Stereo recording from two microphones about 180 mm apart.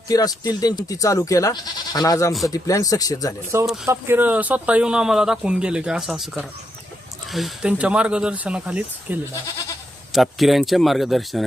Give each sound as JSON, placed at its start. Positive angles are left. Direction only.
{"t": 0.1, "sound": "speech", "side_deg": 20}
{"t": 3.5, "sound": "speech", "side_deg": -15}